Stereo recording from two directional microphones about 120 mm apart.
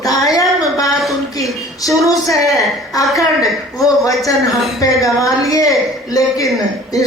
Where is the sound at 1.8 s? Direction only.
25° left (ahead or behind).